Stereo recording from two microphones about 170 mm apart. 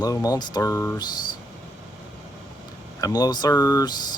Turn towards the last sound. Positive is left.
turn(degrees=25)  # may be behind; listen again after turning